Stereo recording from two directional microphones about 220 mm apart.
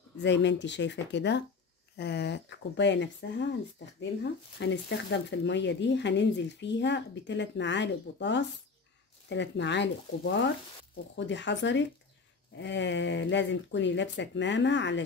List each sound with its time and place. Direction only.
0.2 s speech: 55° left (ahead or behind)